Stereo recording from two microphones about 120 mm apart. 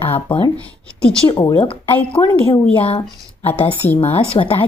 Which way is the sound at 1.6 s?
45° left (ahead or behind).